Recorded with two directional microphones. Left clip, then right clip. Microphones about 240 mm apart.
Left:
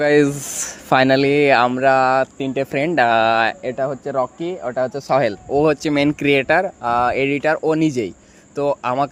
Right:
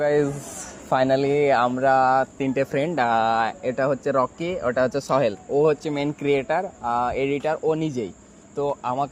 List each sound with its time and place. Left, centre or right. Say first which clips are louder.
0.0 s speech: left 6 dB; left
3.8 s speech: right 3 dB; centre
5.2 s speech: left 3 dB; left